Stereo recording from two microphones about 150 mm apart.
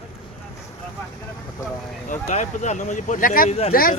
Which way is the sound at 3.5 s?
45° left (ahead or behind).